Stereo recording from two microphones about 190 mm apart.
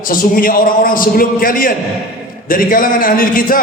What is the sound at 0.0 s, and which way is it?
A man's voice, 45° left (ahead or behind).